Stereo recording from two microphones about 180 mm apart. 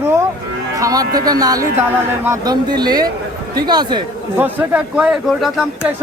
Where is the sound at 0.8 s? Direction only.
20° right (ahead or behind).